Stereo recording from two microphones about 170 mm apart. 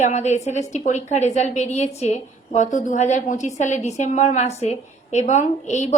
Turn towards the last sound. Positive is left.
turn(degrees=45)  # may be behind; listen again after turning